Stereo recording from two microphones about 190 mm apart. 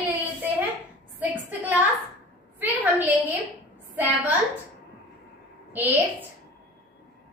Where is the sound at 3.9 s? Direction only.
10° right (ahead or behind).